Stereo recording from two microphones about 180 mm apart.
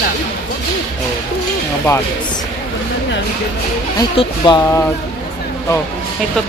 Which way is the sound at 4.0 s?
25° left (ahead or behind).